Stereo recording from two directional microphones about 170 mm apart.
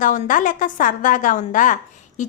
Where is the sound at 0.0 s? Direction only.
50° left (ahead or behind).